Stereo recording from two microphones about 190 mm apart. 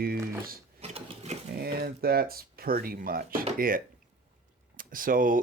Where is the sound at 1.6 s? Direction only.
55° right (ahead or behind).